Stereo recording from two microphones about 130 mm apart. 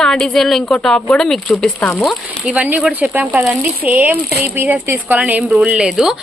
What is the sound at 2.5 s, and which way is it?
A woman's voice, 10° right (ahead or behind).